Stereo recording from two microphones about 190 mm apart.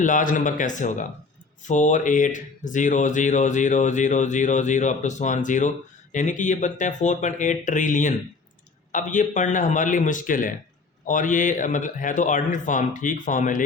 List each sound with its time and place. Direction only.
0.0 s a man's voice: 45° left (ahead or behind)